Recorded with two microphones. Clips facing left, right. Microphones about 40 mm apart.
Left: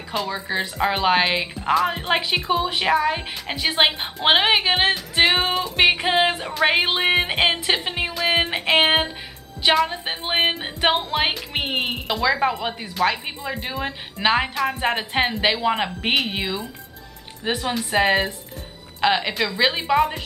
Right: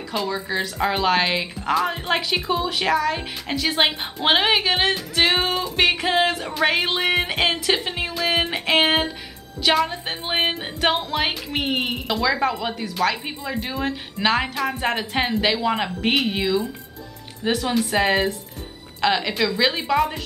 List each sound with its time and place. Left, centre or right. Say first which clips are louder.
0.3 s a woman's voice: even; centre